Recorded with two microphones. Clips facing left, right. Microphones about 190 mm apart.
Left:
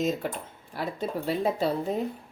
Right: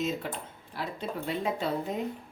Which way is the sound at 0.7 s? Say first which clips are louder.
Left 4 dB; 40° left (ahead or behind).